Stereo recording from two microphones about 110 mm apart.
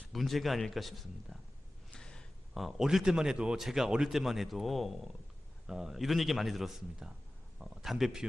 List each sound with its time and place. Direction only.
0.1 s a man's voice: centre (ahead or behind)